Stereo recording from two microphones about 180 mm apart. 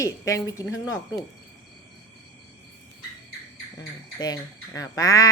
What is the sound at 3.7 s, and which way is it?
Speech, 20° left (ahead or behind).